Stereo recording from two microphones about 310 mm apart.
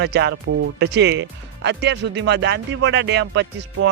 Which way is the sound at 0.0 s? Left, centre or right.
Right.